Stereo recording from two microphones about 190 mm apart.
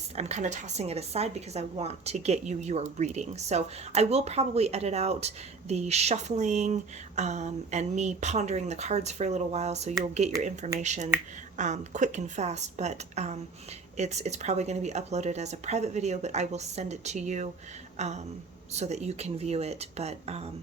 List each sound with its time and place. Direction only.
0.2 s speech: 35° right (ahead or behind)
17.9 s a sound: 35° right (ahead or behind)
18.7 s speech: 35° right (ahead or behind)